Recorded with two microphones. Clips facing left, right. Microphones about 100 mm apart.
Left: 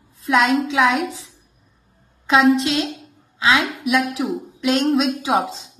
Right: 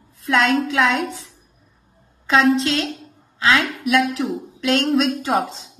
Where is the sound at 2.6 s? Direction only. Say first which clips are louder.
Even; 20° left (ahead or behind).